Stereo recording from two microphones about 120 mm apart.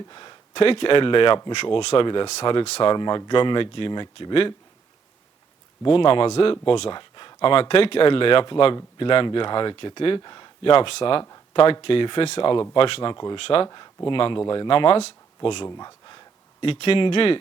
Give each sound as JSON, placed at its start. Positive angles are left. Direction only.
{"t": 0.1, "sound": "speech", "side_deg": 40}
{"t": 1.8, "sound": "speech", "side_deg": 60}
{"t": 2.2, "sound": "speech", "side_deg": 45}
{"t": 2.6, "sound": "speech", "side_deg": 60}
{"t": 2.9, "sound": "speech", "side_deg": 40}
{"t": 5.8, "sound": "speech", "side_deg": 45}
{"t": 15.4, "sound": "speech", "side_deg": 40}